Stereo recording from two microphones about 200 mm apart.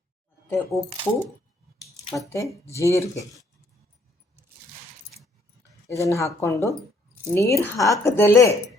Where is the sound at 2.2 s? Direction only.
15° left (ahead or behind).